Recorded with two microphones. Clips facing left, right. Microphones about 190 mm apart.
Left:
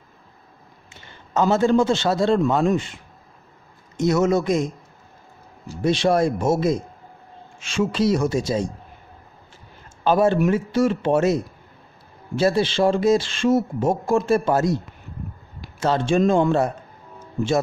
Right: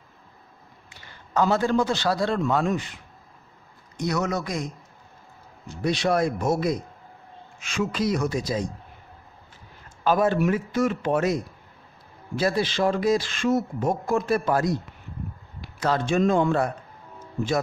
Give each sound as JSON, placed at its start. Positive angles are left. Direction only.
{"t": 0.9, "sound": "a man's voice", "side_deg": 25}
{"t": 5.8, "sound": "speech", "side_deg": 30}
{"t": 10.0, "sound": "speech", "side_deg": 30}
{"t": 15.8, "sound": "speech", "side_deg": 25}